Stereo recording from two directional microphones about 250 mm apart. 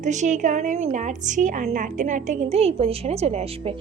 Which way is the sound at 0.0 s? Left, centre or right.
Right.